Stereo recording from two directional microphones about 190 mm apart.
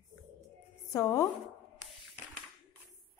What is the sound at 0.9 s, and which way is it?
Speech, 15° left (ahead or behind).